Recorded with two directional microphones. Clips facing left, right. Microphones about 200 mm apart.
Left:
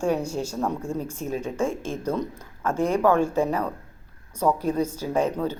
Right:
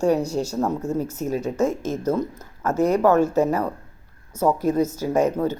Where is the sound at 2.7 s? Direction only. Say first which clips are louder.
Right 4 dB; 40° right (ahead or behind).